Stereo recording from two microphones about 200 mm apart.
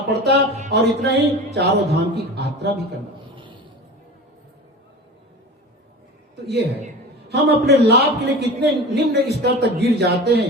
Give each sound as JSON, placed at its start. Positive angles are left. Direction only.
{"t": 0.1, "sound": "a man's voice", "side_deg": -55}
{"t": 7.3, "sound": "a man's voice", "side_deg": -55}